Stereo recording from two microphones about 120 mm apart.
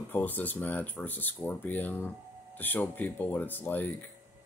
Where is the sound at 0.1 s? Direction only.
15° left (ahead or behind).